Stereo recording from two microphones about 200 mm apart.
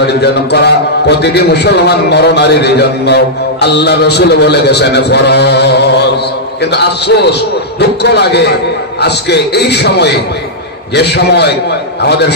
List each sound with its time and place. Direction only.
0.0 s a man's voice: 55° left (ahead or behind)